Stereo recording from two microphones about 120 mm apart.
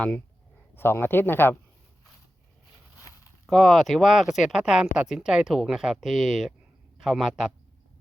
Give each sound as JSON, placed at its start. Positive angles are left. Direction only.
{"t": 0.8, "sound": "speech", "side_deg": 20}
{"t": 3.1, "sound": "a sound", "side_deg": 30}
{"t": 3.4, "sound": "speech", "side_deg": 0}